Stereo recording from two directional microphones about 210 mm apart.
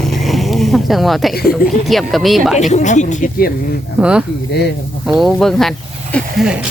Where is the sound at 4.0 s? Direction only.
5° right (ahead or behind).